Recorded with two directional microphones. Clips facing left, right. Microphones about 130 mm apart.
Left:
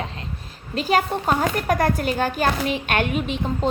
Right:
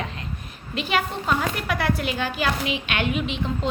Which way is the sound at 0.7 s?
40° left (ahead or behind).